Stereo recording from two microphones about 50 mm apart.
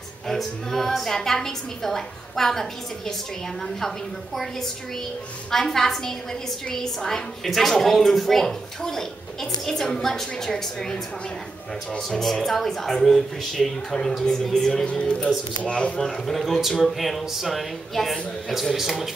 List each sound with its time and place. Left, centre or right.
0.3 s a woman's voice: centre
5.5 s a woman's voice: centre
12.2 s a woman's voice: centre
14.9 s speech: left
16.0 s speech: centre